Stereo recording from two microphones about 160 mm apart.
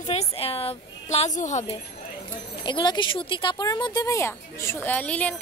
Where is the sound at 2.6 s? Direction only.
30° left (ahead or behind).